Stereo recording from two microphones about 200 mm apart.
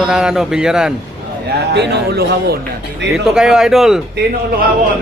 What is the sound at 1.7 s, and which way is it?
Speech, 55° right (ahead or behind).